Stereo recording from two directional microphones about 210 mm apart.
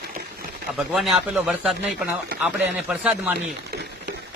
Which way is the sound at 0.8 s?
Centre (ahead or behind).